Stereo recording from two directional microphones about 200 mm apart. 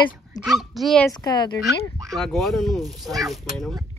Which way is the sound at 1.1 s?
20° left (ahead or behind).